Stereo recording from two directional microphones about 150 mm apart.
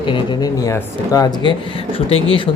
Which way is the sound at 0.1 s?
25° left (ahead or behind).